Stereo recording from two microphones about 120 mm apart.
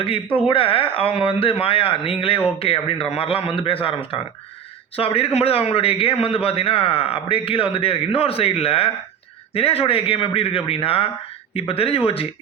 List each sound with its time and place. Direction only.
0.0 s a man's voice: 50° left (ahead or behind)